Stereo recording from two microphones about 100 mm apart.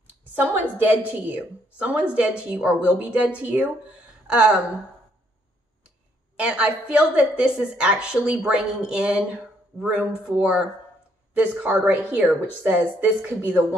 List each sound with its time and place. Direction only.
0.3 s a woman's voice: 20° right (ahead or behind)
6.3 s a woman's voice: 10° right (ahead or behind)